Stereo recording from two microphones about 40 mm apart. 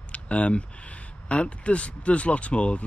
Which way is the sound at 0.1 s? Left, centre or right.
Left.